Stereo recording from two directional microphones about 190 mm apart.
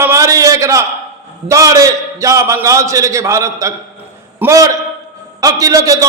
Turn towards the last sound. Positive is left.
turn(degrees=-20)  # may be behind; listen again after turning